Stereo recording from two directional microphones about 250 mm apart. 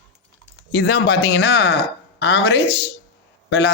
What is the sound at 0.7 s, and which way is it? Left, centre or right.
Speech, left.